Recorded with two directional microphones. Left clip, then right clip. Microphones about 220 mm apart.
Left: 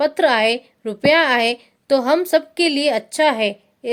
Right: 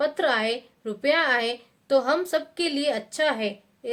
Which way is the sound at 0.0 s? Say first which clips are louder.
Left 8 dB; 35° left (ahead or behind).